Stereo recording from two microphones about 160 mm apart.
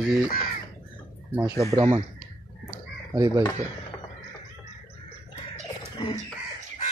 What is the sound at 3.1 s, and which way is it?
Speech, 20° right (ahead or behind).